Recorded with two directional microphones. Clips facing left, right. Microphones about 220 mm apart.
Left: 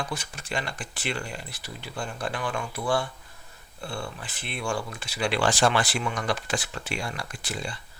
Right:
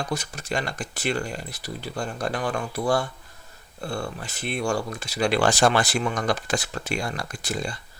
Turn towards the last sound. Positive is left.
turn(degrees=-40)  # may be behind; listen again after turning